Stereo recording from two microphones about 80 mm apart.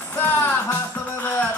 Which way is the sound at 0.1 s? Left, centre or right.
Left.